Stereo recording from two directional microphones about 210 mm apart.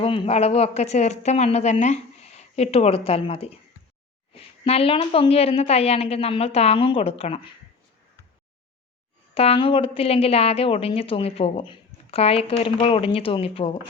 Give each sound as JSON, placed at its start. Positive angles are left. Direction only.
{"t": 0.0, "sound": "a woman's voice", "side_deg": 25}
{"t": 9.3, "sound": "a woman's voice", "side_deg": 30}